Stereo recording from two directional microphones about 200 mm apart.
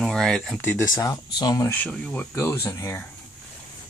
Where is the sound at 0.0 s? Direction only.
Centre (ahead or behind).